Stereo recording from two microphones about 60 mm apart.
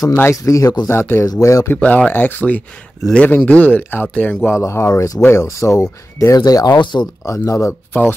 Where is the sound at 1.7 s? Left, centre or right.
Left.